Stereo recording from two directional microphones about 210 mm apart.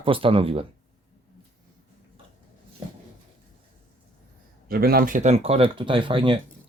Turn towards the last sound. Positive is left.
turn(degrees=-25)  # may be behind; listen again after turning